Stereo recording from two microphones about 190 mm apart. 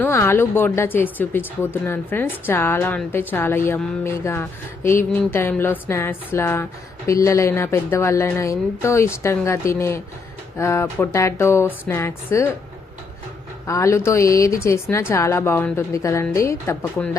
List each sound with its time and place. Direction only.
0.0 s speech: 15° left (ahead or behind)
13.7 s speech: 15° left (ahead or behind)